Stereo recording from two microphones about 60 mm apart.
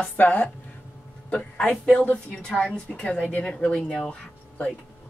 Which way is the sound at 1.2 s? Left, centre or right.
Left.